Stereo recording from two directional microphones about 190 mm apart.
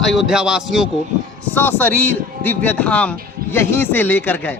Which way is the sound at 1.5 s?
10° left (ahead or behind).